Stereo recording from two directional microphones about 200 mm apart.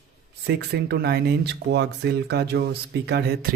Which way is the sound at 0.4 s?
55° right (ahead or behind).